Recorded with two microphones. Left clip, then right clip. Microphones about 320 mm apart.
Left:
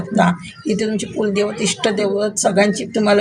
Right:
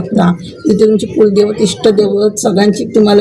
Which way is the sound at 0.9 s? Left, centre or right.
Left.